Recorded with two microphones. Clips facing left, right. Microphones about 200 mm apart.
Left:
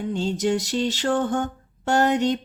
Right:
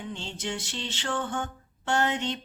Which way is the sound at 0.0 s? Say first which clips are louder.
Left 12 dB; 40° left (ahead or behind).